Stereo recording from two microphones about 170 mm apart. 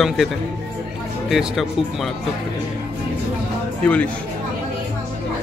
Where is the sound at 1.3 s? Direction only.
Centre (ahead or behind).